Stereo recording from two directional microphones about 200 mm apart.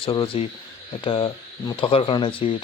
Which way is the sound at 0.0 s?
25° left (ahead or behind).